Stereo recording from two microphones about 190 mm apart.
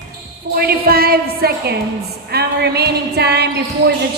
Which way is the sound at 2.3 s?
60° right (ahead or behind).